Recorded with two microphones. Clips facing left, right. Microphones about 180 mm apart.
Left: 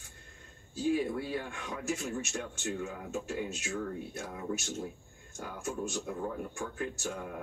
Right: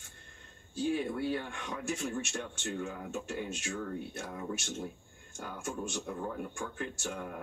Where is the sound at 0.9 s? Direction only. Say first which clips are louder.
Even; 5° left (ahead or behind).